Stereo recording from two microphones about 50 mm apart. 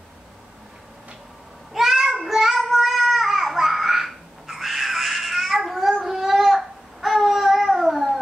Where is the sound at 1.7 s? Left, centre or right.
Centre.